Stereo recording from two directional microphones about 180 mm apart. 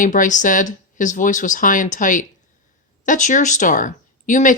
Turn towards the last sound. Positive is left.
turn(degrees=45)  # may be behind; listen again after turning